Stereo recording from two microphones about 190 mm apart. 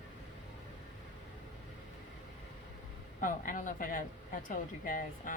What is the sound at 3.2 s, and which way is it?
A woman's voice, 45° left (ahead or behind).